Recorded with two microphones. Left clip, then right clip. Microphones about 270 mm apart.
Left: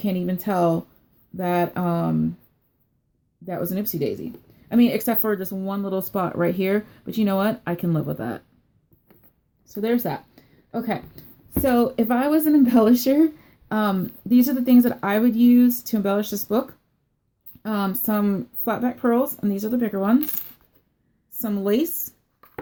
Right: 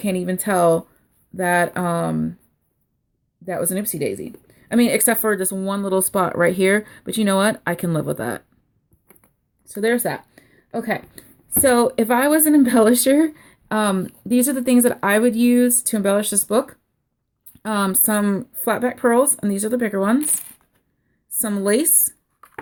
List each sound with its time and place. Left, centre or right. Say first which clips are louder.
0.0 s speech: right 4 dB; right
3.4 s speech: right 4 dB; right
9.8 s speech: right 4 dB; right
21.4 s speech: right 3 dB; right